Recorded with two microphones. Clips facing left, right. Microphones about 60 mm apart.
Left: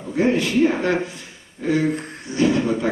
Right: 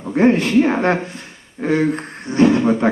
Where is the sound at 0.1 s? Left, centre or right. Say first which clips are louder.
Right 5 dB; right.